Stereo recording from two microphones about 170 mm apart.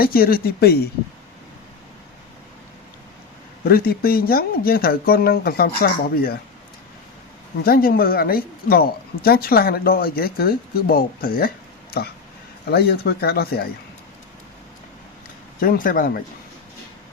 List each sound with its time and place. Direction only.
0.0 s speech: 60° left (ahead or behind)
3.7 s speech: 60° left (ahead or behind)
7.6 s speech: 60° left (ahead or behind)
12.7 s speech: 70° left (ahead or behind)
15.6 s speech: 55° left (ahead or behind)